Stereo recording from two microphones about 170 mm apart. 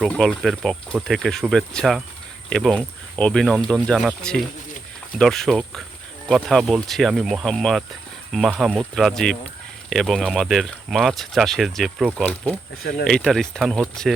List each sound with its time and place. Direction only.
0.0 s speech: centre (ahead or behind)